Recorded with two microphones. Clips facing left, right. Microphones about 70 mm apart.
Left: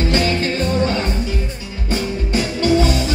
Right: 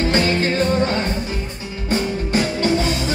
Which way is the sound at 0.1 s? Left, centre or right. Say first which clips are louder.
Even; right.